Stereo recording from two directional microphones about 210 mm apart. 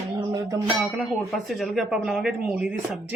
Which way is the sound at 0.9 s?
Centre (ahead or behind).